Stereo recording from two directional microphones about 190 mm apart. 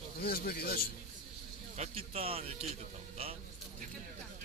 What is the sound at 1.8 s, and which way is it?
Speech, 30° right (ahead or behind).